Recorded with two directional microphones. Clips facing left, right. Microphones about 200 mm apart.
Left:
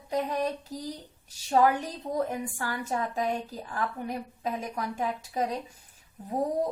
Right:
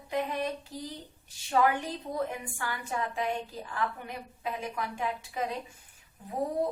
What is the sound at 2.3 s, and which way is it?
A woman's voice, 40° left (ahead or behind).